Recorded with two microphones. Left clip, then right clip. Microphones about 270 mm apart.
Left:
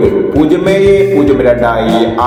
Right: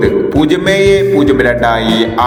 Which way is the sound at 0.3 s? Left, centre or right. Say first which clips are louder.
Left 1 dB; right.